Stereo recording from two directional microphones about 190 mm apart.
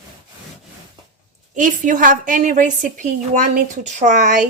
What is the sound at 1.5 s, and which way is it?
A woman's voice, 45° right (ahead or behind).